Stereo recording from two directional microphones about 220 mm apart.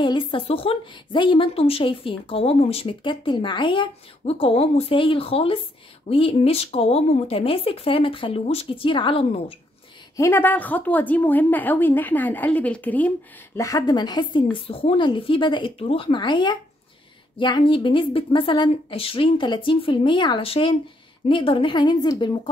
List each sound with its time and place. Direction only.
0.0 s a woman's voice: 20° left (ahead or behind)
10.1 s a woman's voice: 10° left (ahead or behind)